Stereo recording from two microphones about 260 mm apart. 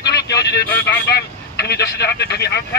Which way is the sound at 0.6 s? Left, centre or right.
Centre.